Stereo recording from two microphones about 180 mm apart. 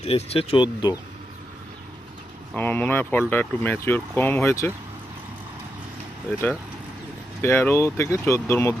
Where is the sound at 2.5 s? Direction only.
10° left (ahead or behind).